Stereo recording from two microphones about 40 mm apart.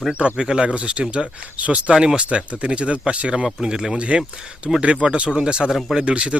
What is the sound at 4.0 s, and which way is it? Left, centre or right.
Speech, right.